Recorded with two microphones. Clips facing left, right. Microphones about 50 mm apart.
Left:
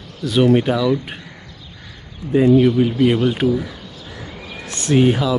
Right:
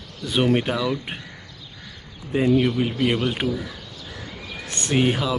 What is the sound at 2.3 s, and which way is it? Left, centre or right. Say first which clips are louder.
Speech: left 6 dB; centre.